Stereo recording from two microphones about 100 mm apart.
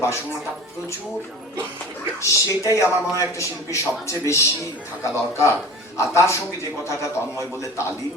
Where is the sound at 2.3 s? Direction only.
30° left (ahead or behind).